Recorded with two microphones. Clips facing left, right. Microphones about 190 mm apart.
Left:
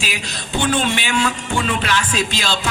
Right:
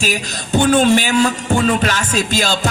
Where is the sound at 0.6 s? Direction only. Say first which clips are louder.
Right 7 dB; 45° right (ahead or behind).